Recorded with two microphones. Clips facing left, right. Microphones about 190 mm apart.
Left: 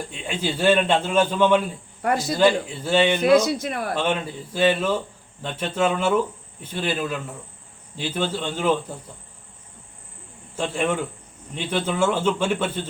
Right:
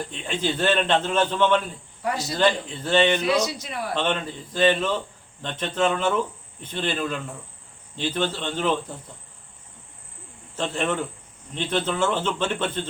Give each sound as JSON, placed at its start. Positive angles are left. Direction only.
{"t": 0.1, "sound": "a man's voice", "side_deg": 10}
{"t": 2.0, "sound": "speech", "side_deg": 55}
{"t": 2.3, "sound": "a man's voice", "side_deg": 10}
{"t": 3.2, "sound": "a man's voice", "side_deg": 50}
{"t": 3.9, "sound": "a man's voice", "side_deg": 10}
{"t": 10.5, "sound": "a man's voice", "side_deg": 10}